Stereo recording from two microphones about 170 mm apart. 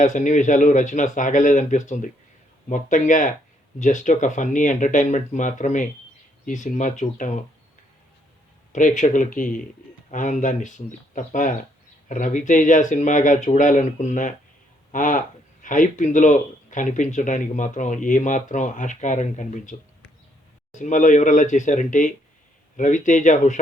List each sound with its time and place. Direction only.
0.0 s speech: 45° left (ahead or behind)
8.7 s speech: 45° left (ahead or behind)
20.7 s speech: 45° left (ahead or behind)